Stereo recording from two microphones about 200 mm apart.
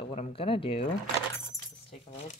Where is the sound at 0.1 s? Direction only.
30° left (ahead or behind).